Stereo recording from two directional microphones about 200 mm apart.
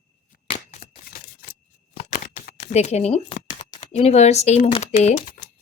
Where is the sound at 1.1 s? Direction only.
45° left (ahead or behind).